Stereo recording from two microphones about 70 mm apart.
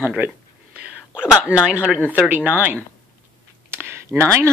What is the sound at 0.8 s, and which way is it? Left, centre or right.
Whispering, centre.